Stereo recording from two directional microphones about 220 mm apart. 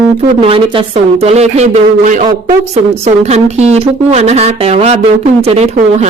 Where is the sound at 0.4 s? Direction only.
25° right (ahead or behind).